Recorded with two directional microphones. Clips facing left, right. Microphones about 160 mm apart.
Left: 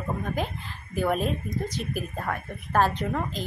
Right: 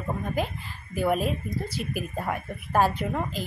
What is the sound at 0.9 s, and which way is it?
Speech, 5° right (ahead or behind).